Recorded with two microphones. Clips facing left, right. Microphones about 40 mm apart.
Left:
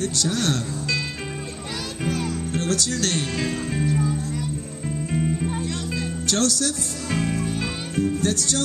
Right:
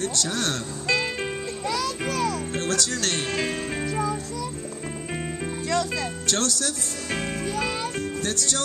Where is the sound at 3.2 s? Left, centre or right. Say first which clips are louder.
Left 1 dB; centre.